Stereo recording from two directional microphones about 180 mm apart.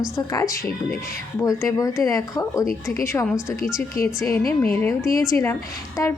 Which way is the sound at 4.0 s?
55° left (ahead or behind).